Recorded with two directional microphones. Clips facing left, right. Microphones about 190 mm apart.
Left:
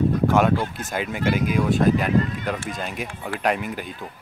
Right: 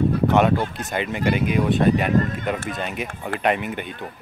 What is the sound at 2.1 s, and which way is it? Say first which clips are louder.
Speech: right 1 dB; 45° right (ahead or behind).